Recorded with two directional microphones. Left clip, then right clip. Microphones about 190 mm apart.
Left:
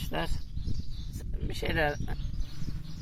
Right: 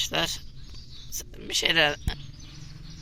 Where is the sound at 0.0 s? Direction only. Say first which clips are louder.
Right 8 dB; 10° right (ahead or behind).